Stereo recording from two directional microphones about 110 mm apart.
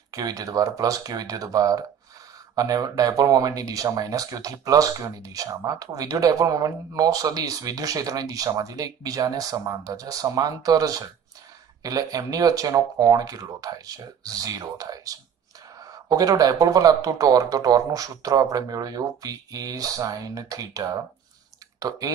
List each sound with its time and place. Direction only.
0.1 s speech: 35° right (ahead or behind)